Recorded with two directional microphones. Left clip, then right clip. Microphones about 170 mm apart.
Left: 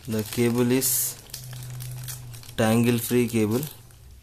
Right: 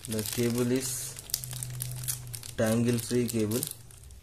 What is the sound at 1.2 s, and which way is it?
Crumpling, centre (ahead or behind).